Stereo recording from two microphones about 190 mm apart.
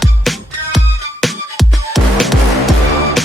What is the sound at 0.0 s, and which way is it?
Music, centre (ahead or behind).